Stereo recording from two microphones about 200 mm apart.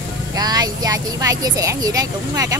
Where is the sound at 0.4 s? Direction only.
20° right (ahead or behind).